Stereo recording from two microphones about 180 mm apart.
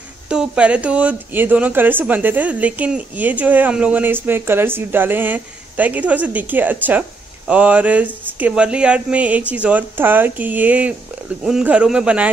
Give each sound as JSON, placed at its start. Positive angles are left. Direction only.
{"t": 0.3, "sound": "speech", "side_deg": -5}